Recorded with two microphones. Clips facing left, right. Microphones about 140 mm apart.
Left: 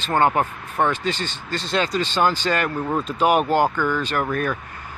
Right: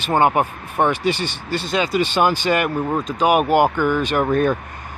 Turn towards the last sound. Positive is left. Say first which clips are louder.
# right 6 dB
turn(degrees=-25)  # may be behind; listen again after turning